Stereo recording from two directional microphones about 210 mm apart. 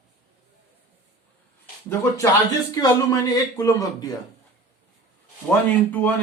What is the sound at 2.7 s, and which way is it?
Speech, 20° left (ahead or behind).